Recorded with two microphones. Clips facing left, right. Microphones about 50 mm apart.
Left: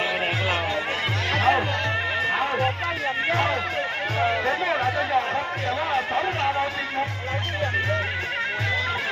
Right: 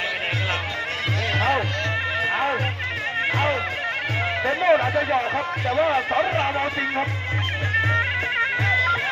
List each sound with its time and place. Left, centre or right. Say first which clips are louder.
1.4 s music: left 2 dB; centre
4.6 s speech: right 5 dB; centre